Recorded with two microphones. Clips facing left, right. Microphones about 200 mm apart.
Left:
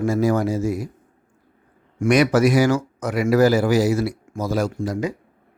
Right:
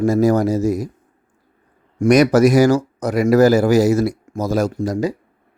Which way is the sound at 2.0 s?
40° right (ahead or behind).